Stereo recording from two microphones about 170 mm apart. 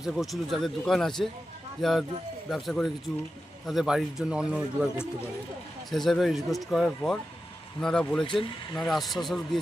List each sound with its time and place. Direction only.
0.0 s speech: centre (ahead or behind)